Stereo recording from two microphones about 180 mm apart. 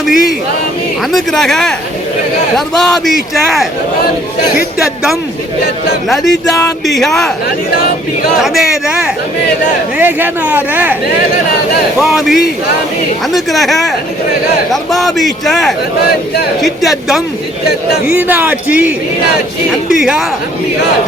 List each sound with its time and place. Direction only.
0.0 s a man's voice: centre (ahead or behind)
6.1 s a man's voice: centre (ahead or behind)
8.4 s a man's voice: centre (ahead or behind)
11.9 s a man's voice: centre (ahead or behind)
14.9 s a man's voice: centre (ahead or behind)
17.7 s a man's voice: 65° left (ahead or behind)
18.1 s a man's voice: 10° right (ahead or behind)